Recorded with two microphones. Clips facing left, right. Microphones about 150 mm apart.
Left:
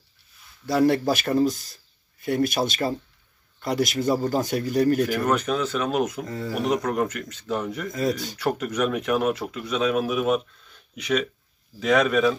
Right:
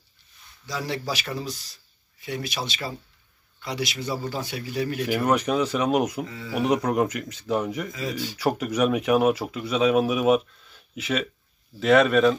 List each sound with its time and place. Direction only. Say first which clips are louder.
0.7 s speech: left 10 dB; 55° left (ahead or behind)
5.1 s speech: right 1 dB; 10° right (ahead or behind)
6.2 s speech: left 6 dB; 45° left (ahead or behind)
6.5 s speech: right 2 dB; 10° right (ahead or behind)